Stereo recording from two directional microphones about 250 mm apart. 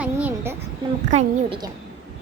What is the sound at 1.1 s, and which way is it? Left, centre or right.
Speech, right.